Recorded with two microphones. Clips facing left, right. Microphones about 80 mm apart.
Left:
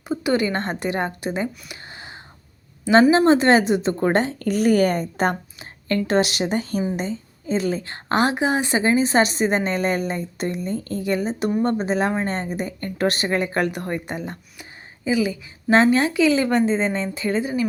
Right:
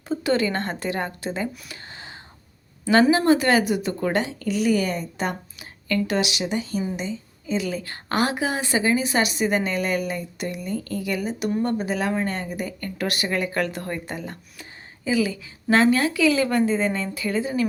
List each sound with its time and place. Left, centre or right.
0.1 s a woman's voice: centre